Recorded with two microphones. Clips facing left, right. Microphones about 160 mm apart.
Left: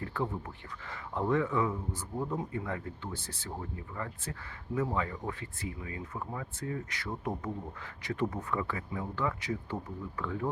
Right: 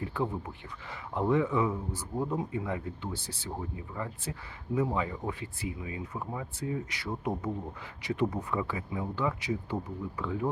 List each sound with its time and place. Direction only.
0.0 s speech: 15° right (ahead or behind)